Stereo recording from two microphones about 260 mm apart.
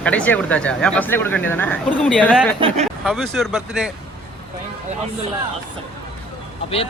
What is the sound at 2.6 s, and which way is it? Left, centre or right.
Speech, right.